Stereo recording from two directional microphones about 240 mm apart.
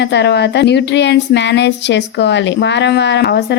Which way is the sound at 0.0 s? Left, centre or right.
Left.